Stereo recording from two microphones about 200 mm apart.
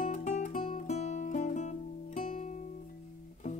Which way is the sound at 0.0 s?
35° left (ahead or behind).